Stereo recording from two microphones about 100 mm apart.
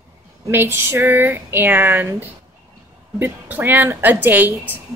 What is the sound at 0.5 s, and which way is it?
A woman's voice, 25° right (ahead or behind).